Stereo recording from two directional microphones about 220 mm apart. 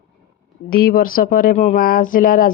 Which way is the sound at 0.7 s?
40° left (ahead or behind).